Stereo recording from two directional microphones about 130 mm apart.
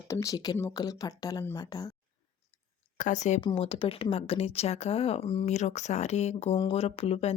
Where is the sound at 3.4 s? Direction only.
45° left (ahead or behind).